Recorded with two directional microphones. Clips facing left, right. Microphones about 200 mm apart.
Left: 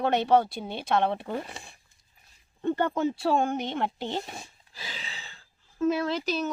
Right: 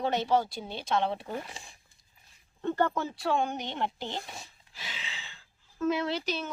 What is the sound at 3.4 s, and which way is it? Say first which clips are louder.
Speech: left 4 dB; 50° left (ahead or behind).